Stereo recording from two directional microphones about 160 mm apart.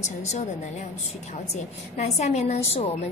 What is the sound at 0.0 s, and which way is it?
A woman's voice, 45° left (ahead or behind).